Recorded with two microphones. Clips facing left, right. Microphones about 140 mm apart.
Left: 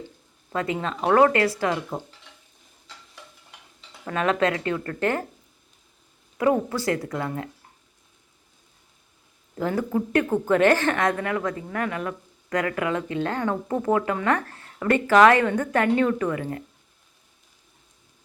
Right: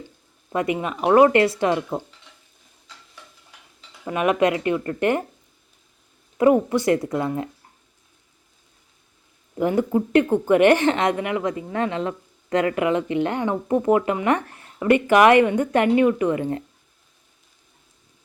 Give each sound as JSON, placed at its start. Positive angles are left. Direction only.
{"t": 0.5, "sound": "a woman's voice", "side_deg": -15}
{"t": 4.0, "sound": "speech", "side_deg": -15}
{"t": 6.3, "sound": "a woman's voice", "side_deg": -20}
{"t": 9.6, "sound": "a woman's voice", "side_deg": -20}